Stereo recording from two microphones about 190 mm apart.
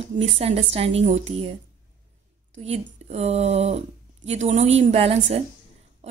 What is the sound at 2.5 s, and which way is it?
A woman's voice, 35° right (ahead or behind).